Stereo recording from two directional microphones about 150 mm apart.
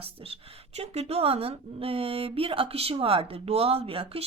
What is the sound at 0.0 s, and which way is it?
A woman's voice, 40° right (ahead or behind).